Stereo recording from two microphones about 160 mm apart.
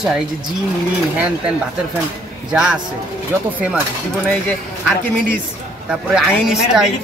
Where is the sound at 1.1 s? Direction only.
10° right (ahead or behind).